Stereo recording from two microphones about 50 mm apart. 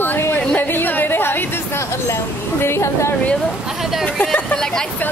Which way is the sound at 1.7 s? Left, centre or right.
Left.